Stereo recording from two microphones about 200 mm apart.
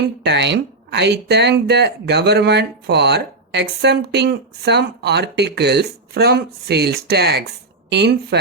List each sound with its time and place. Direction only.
0.2 s speech: 60° right (ahead or behind)